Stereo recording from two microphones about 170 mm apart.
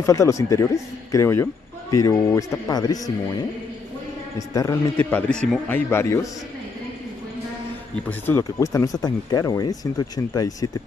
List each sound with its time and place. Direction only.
0.0 s a man's voice: 15° left (ahead or behind)
4.4 s speech: 20° left (ahead or behind)
5.1 s a man's voice: 5° left (ahead or behind)
8.1 s speech: 15° left (ahead or behind)